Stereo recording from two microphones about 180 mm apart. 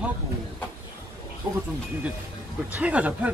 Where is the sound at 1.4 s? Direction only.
10° right (ahead or behind).